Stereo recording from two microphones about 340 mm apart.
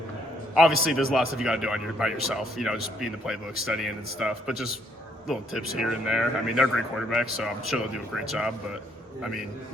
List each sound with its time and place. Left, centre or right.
0.5 s speech: centre